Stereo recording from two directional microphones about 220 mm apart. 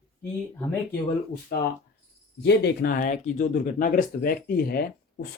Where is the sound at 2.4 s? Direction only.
50° left (ahead or behind).